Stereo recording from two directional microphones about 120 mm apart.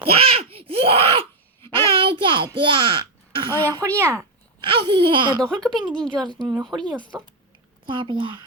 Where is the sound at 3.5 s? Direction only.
15° left (ahead or behind).